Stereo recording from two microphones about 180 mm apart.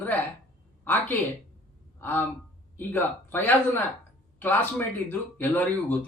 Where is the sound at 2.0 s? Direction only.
10° left (ahead or behind).